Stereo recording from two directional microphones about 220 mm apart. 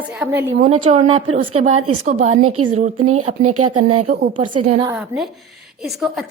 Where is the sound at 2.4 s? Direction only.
85° right.